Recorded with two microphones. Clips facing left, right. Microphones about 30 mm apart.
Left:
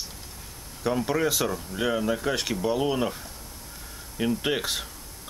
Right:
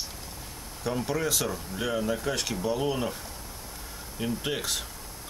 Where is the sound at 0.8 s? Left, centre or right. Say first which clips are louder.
Left 4 dB; centre.